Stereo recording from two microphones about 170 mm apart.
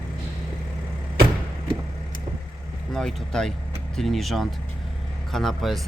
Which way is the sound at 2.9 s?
5° left (ahead or behind).